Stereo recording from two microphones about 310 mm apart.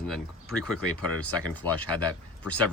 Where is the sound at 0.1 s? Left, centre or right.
Centre.